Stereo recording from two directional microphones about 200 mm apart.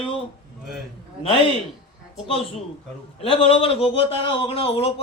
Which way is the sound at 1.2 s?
30° left (ahead or behind).